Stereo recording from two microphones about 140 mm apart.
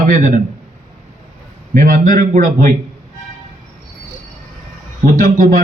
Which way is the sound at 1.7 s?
70° right (ahead or behind).